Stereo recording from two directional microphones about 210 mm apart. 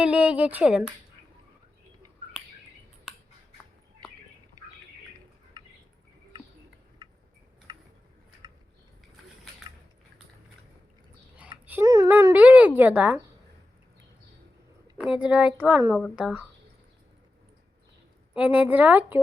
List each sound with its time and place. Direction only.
0.0 s a woman's voice: 5° right (ahead or behind)
7.0 s a sound: 20° right (ahead or behind)
11.6 s speech: 10° right (ahead or behind)
14.9 s speech: 5° right (ahead or behind)
18.3 s speech: 5° right (ahead or behind)